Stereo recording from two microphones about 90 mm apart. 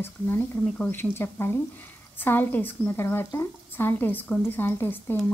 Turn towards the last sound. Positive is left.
turn(degrees=25)  # may be behind; listen again after turning